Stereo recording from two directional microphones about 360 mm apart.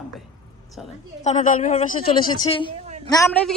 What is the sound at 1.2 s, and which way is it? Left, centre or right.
A woman's voice, centre.